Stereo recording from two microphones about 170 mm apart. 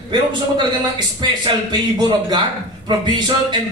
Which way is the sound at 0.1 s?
25° right (ahead or behind).